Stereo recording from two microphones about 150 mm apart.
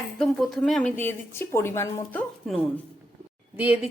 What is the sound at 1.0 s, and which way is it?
Speech, 15° left (ahead or behind).